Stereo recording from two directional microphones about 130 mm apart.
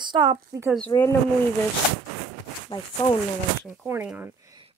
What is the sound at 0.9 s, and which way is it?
Speech, 30° left (ahead or behind).